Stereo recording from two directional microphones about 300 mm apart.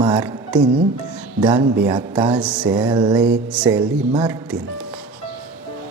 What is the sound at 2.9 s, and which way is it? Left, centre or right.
Mantra, centre.